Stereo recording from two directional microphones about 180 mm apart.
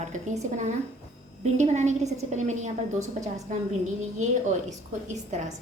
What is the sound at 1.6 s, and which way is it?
Speech, 40° right (ahead or behind).